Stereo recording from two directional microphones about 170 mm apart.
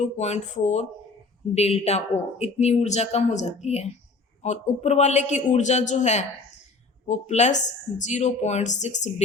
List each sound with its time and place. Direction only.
0.0 s speech: 45° left (ahead or behind)